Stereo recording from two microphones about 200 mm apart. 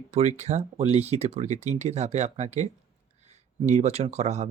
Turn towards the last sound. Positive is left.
turn(degrees=-35)  # may be behind; listen again after turning